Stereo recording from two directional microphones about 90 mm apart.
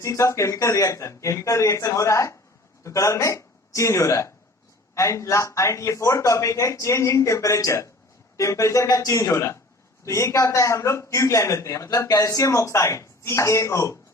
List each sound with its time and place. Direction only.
0.0 s a man's voice: 35° left (ahead or behind)